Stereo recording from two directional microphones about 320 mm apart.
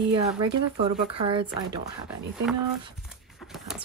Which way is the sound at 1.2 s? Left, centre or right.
Centre.